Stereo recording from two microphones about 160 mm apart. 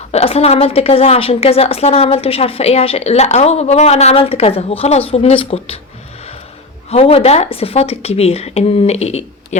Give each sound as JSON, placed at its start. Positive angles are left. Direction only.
{"t": 0.1, "sound": "a woman's voice", "side_deg": 40}
{"t": 6.9, "sound": "a woman's voice", "side_deg": 40}